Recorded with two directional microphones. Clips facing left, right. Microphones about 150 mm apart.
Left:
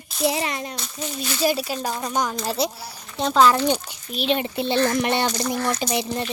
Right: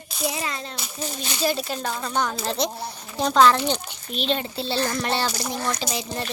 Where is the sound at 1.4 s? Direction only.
10° left (ahead or behind).